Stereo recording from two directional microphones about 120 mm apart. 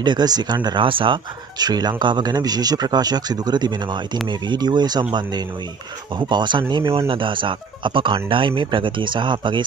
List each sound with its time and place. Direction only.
0.0 s speech: 35° right (ahead or behind)
6.1 s speech: 40° right (ahead or behind)
6.8 s speech: 25° right (ahead or behind)
7.1 s speech: 45° right (ahead or behind)